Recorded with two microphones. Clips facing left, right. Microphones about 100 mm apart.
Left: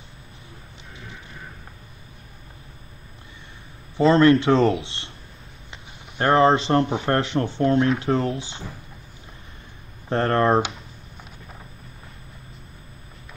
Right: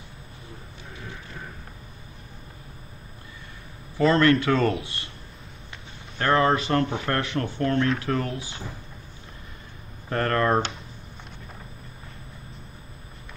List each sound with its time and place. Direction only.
3.9 s speech: 20° left (ahead or behind)
6.1 s speech: 25° left (ahead or behind)
10.0 s speech: 25° left (ahead or behind)